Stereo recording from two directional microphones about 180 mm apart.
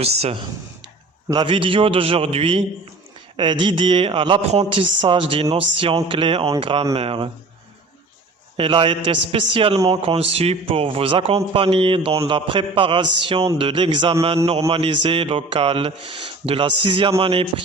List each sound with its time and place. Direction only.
0.0 s a man's voice: 35° right (ahead or behind)
8.5 s a man's voice: 30° right (ahead or behind)